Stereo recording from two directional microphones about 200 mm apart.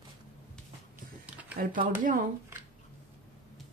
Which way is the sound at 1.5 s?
45° right (ahead or behind).